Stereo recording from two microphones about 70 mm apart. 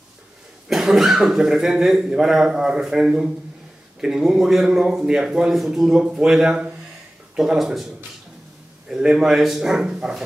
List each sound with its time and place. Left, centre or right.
0.7 s speech: centre